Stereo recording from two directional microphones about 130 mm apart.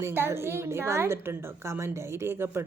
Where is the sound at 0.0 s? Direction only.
20° right (ahead or behind).